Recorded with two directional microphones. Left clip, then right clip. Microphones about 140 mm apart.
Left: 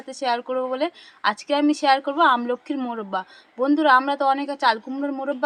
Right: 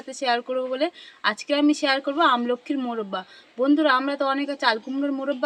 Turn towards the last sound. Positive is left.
turn(degrees=-5)  # may be behind; listen again after turning